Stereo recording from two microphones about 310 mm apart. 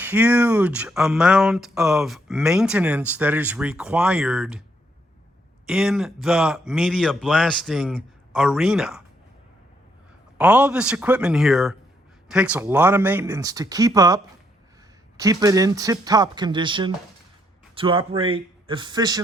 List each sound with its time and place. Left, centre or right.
0.0 s speech: centre
5.6 s speech: centre
10.3 s speech: centre
15.2 s speech: centre